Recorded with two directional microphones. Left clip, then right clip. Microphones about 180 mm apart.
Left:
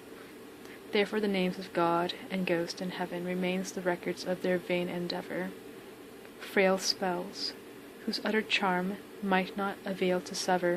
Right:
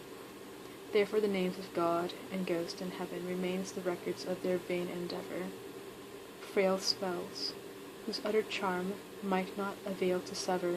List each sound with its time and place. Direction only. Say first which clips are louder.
0.9 s a woman's voice: left 1 dB; 30° left (ahead or behind)
6.5 s a woman's voice: left 4 dB; 35° left (ahead or behind)